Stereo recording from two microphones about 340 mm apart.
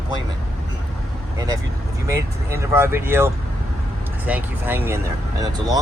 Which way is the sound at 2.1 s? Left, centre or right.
Centre.